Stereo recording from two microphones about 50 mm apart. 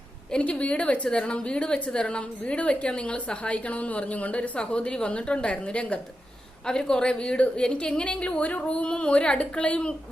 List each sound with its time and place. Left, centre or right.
0.3 s a woman's voice: left